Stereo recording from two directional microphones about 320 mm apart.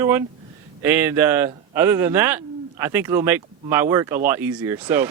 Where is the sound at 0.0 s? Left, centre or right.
Centre.